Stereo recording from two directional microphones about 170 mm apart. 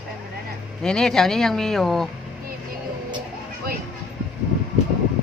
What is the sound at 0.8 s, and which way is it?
Speech, 5° left (ahead or behind).